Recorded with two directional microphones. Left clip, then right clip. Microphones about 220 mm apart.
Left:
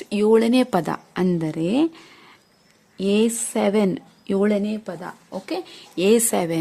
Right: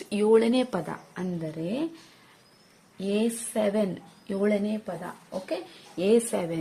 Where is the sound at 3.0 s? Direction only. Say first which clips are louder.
Left 8 dB; 50° left (ahead or behind).